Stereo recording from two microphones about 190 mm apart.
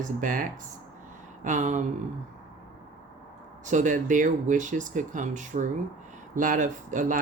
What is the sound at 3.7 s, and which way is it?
Speech, 40° right (ahead or behind).